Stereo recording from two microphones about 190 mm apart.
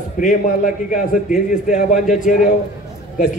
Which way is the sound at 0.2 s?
40° left (ahead or behind).